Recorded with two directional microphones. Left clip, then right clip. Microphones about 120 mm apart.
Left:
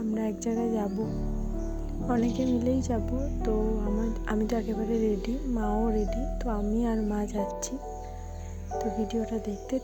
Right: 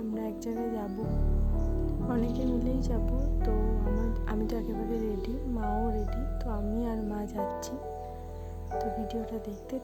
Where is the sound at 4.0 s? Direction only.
30° left (ahead or behind).